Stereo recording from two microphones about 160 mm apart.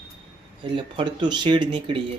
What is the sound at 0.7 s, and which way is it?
Speech, 30° right (ahead or behind).